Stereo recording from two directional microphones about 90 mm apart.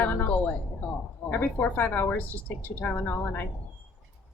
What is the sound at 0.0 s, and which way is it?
A woman's voice, 20° left (ahead or behind).